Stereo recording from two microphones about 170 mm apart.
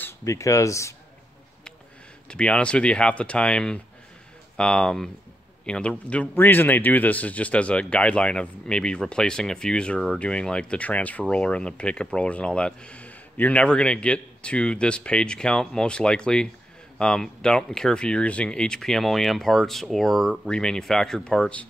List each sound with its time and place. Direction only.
0.0 s speech: 20° left (ahead or behind)
2.2 s speech: 5° left (ahead or behind)